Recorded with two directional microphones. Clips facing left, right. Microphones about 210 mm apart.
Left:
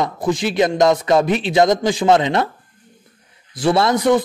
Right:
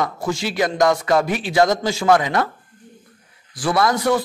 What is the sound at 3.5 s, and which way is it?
Speech, 25° left (ahead or behind).